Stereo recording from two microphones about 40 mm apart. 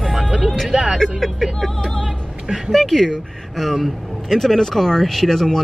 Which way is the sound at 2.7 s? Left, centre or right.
Centre.